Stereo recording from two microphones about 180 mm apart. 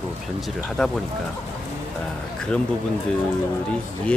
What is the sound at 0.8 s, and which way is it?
Speech, centre (ahead or behind).